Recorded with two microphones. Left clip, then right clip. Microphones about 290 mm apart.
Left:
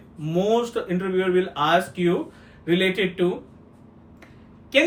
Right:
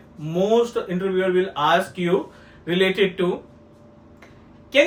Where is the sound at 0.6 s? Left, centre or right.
Centre.